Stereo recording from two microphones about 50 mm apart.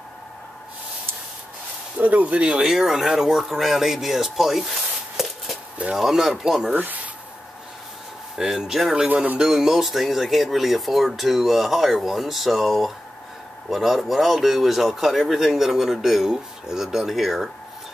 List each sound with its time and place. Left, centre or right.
2.0 s speech: right
2.6 s speech: centre
6.7 s speech: right
8.4 s speech: centre
9.1 s speech: right
9.4 s speech: centre